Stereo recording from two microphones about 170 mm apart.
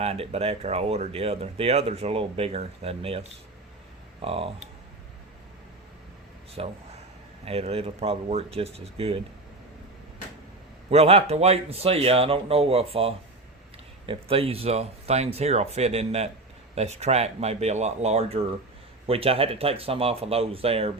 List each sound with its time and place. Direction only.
0.0 s speech: 35° right (ahead or behind)
6.6 s speech: 35° right (ahead or behind)
10.8 s speech: 35° right (ahead or behind)